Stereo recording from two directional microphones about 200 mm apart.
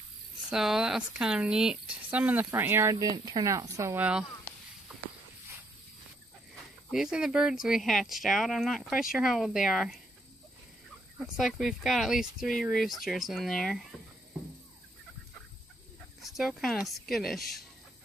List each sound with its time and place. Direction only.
0.5 s speech: centre (ahead or behind)
6.9 s speech: 5° right (ahead or behind)
11.1 s speech: centre (ahead or behind)
16.2 s speech: centre (ahead or behind)